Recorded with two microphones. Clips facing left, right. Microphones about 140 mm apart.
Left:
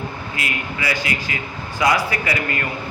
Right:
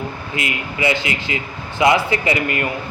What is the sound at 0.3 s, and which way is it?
A man's voice, 25° right (ahead or behind).